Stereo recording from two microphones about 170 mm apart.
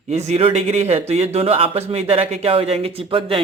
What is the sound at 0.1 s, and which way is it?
A man's voice, 40° right (ahead or behind).